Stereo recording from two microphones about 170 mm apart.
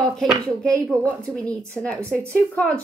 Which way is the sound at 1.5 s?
5° left (ahead or behind).